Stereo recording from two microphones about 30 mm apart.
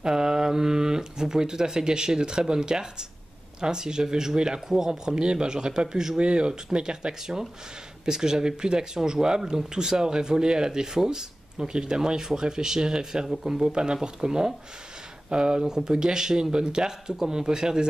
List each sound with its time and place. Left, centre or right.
0.0 s speech: right
6.1 s speech: right; by 13.7 s centre
13.7 s speech: right